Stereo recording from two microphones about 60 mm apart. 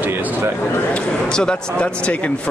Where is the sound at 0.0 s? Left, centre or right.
Right.